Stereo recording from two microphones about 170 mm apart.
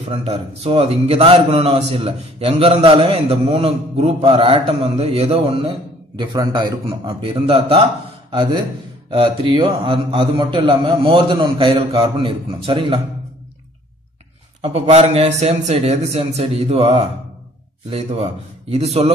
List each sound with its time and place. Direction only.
0.1 s a man's voice: 35° right (ahead or behind)
14.6 s a man's voice: 40° right (ahead or behind)